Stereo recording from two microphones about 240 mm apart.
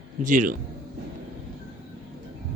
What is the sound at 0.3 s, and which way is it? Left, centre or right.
Speech, right.